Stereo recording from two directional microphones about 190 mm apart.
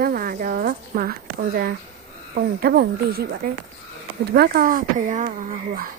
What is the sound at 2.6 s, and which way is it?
Speech, 55° right (ahead or behind).